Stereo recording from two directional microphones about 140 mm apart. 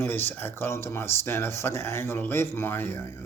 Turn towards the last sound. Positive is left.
turn(degrees=20)  # may be behind; listen again after turning